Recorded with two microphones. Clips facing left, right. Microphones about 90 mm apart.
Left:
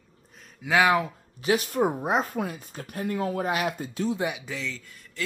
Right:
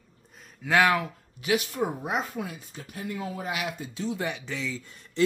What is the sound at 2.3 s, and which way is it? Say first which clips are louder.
Speech: left 4 dB; 50° left (ahead or behind).